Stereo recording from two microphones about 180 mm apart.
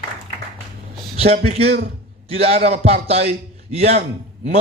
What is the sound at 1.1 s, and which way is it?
Speech, 35° right (ahead or behind).